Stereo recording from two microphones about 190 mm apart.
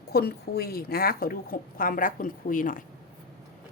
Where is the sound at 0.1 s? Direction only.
55° left (ahead or behind).